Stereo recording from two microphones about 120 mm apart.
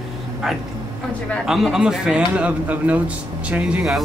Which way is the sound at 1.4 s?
5° right (ahead or behind).